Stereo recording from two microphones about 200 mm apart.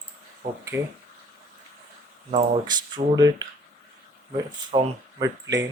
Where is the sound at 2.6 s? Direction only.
20° right (ahead or behind).